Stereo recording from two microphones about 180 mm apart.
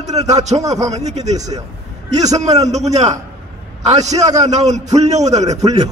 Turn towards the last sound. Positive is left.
turn(degrees=-40)  # may be behind; listen again after turning